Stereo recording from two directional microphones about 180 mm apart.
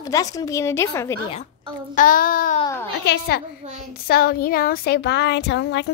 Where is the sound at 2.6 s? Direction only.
15° left (ahead or behind).